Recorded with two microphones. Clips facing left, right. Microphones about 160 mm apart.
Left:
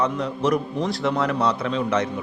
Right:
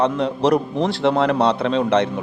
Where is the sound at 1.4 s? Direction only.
85° right.